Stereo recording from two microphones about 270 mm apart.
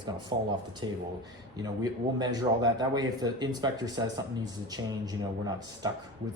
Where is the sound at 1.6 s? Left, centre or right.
Centre.